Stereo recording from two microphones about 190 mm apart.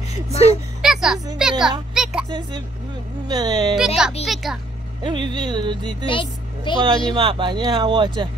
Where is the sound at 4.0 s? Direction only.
5° right (ahead or behind).